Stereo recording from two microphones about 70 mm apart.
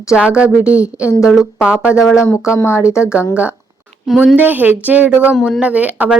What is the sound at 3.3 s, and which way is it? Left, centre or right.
Speech, centre.